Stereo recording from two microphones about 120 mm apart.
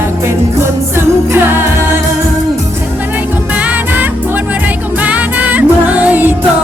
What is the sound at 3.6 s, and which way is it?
Music, 10° right (ahead or behind).